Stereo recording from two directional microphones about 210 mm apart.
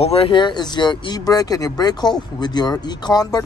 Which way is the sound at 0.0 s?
30° left (ahead or behind).